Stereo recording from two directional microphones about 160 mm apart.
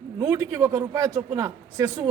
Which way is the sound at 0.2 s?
20° right (ahead or behind).